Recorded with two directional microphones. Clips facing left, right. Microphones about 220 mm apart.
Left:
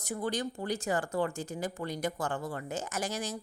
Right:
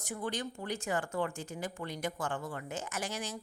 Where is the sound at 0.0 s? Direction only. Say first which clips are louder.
Left 4 dB; 40° left (ahead or behind).